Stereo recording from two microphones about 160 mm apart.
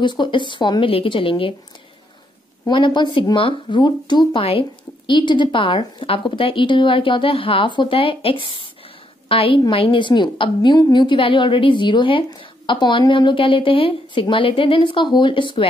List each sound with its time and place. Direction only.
0.0 s speech: 30° left (ahead or behind)
2.6 s speech: 30° left (ahead or behind)